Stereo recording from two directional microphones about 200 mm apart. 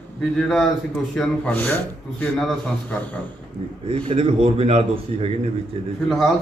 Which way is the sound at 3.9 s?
30° right (ahead or behind).